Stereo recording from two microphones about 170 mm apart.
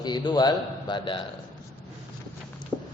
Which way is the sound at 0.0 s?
25° left (ahead or behind).